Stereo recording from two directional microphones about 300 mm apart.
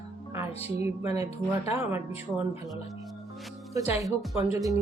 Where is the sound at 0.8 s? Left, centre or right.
Centre.